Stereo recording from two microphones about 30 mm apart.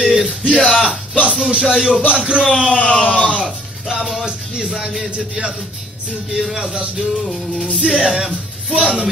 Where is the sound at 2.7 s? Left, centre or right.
Left.